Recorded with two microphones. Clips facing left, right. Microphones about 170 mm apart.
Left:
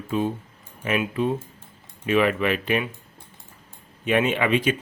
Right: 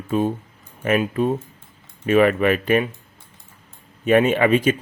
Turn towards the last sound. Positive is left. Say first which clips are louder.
# right 5 dB
turn(degrees=-45)  # may be behind; listen again after turning